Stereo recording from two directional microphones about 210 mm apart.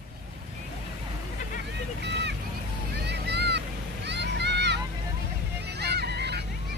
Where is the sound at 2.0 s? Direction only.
55° right (ahead or behind).